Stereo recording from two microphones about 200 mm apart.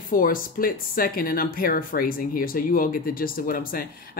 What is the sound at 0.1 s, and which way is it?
Speech, 45° left (ahead or behind).